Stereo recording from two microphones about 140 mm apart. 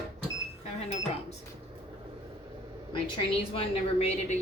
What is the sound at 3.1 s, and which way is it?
A woman's voice, 45° left (ahead or behind).